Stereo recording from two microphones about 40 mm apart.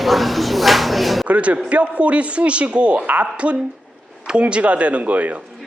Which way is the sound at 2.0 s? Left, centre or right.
Right.